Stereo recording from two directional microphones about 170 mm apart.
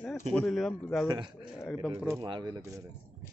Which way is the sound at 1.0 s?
25° right (ahead or behind).